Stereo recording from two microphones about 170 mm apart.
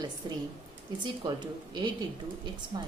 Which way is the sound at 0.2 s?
25° right (ahead or behind).